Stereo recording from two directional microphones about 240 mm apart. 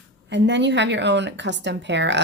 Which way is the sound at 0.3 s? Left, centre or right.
Right.